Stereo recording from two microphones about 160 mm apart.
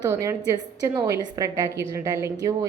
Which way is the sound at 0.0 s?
20° right (ahead or behind).